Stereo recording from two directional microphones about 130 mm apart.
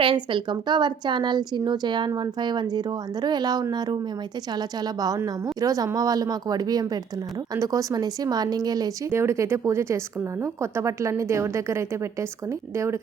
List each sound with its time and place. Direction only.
0.0 s a woman's voice: 40° right (ahead or behind)
9.0 s a woman's voice: 20° right (ahead or behind)